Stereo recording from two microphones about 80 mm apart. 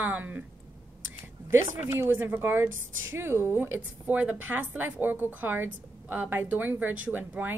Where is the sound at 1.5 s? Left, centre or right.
Right.